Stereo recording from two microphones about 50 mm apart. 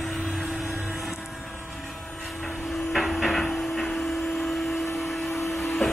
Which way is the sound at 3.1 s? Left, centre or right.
Centre.